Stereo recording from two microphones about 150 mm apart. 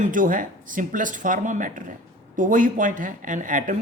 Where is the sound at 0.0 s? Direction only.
65° right (ahead or behind).